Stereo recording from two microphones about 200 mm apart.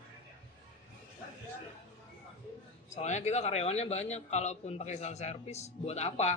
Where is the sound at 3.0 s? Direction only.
35° left (ahead or behind).